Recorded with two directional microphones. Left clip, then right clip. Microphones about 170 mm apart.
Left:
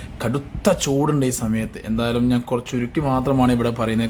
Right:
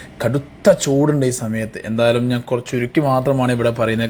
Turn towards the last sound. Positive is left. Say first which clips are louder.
# right 4 dB
turn(degrees=-5)  # may be behind; listen again after turning